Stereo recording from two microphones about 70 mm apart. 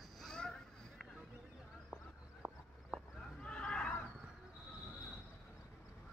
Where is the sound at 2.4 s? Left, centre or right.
Centre.